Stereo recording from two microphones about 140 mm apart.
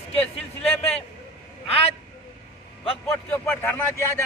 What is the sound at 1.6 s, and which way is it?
Speech, 45° left (ahead or behind).